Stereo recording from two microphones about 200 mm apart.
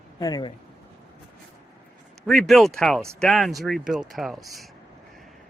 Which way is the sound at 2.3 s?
Centre (ahead or behind).